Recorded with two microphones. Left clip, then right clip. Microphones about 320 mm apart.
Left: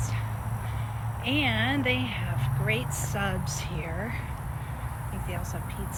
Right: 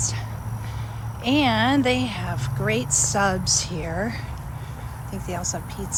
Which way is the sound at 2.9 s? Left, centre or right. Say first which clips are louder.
Right 10 dB; right.